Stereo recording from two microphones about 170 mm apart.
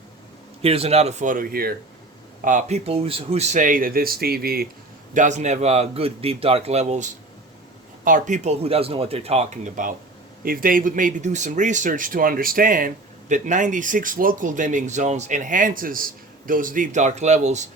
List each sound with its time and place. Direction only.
0.6 s speech: 35° right (ahead or behind); by 1.7 s 60° right (ahead or behind)
2.4 s speech: 50° right (ahead or behind)
5.1 s speech: 45° right (ahead or behind)